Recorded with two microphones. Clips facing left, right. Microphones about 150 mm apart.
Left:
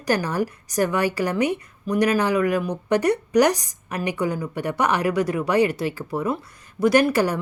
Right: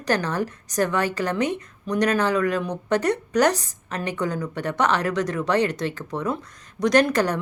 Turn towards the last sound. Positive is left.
turn(degrees=10)  # may be behind; listen again after turning